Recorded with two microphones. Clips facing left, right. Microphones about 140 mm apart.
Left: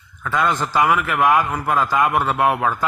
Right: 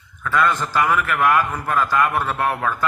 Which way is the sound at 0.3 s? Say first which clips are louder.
Even; 15° left (ahead or behind).